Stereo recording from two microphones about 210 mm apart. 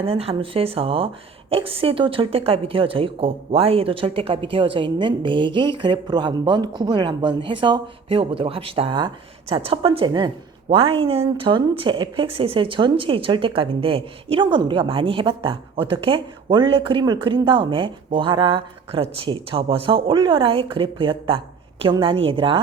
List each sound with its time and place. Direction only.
0.0 s a woman's voice: 25° right (ahead or behind)